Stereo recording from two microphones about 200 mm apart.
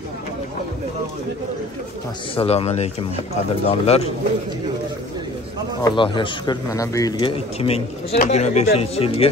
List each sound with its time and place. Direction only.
2.3 s speech: 30° left (ahead or behind)
5.8 s speech: 20° left (ahead or behind)